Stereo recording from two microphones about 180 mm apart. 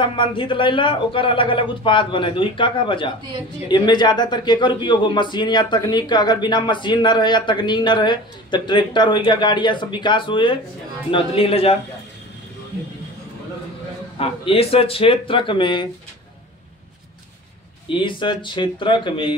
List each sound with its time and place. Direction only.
0.0 s a man's voice: 25° left (ahead or behind)
14.1 s speech: 30° left (ahead or behind)
17.8 s speech: 25° left (ahead or behind)